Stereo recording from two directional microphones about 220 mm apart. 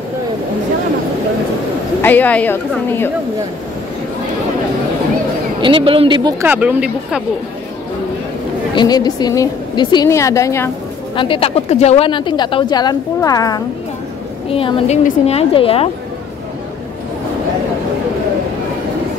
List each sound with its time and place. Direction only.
2.0 s a woman's voice: 10° left (ahead or behind)
5.6 s speech: 25° right (ahead or behind)
6.4 s speech: 10° right (ahead or behind)
8.7 s a woman's voice: 20° left (ahead or behind)
11.1 s speech: 25° left (ahead or behind)